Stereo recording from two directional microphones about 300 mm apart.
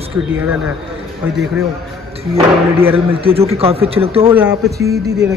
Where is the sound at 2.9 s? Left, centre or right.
Centre.